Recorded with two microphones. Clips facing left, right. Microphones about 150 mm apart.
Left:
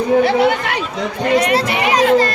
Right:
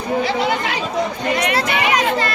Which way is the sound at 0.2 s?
60° left (ahead or behind).